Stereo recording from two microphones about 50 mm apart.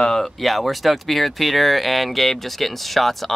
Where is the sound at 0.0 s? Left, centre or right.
Centre.